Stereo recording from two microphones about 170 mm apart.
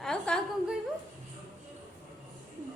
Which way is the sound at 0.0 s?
5° left (ahead or behind).